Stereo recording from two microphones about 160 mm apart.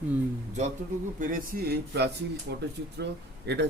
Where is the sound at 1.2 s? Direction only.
65° right (ahead or behind).